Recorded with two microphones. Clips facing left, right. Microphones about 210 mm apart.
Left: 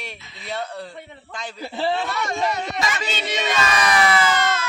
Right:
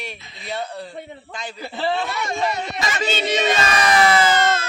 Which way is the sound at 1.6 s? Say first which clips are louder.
Even; 5° left (ahead or behind).